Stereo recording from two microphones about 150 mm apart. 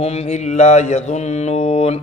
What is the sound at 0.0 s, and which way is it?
Mantra, 45° left (ahead or behind).